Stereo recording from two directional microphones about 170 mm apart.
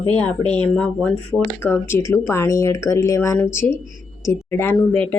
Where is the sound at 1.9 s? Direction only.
15° left (ahead or behind).